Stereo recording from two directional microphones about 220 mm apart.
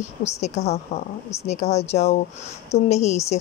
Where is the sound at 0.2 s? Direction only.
30° left (ahead or behind).